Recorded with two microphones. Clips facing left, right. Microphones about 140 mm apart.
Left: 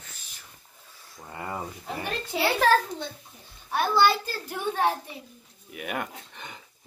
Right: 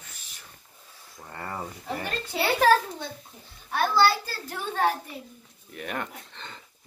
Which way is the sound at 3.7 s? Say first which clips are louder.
Even; 15° left (ahead or behind).